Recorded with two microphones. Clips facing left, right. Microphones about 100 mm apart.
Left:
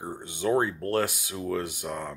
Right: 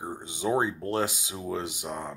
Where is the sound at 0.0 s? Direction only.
15° right (ahead or behind).